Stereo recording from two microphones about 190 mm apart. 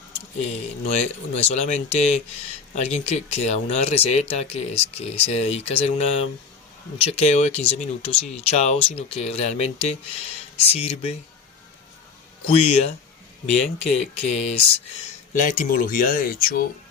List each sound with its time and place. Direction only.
0.4 s speech: 35° left (ahead or behind)
12.5 s speech: 30° left (ahead or behind); by 16.6 s 50° left (ahead or behind)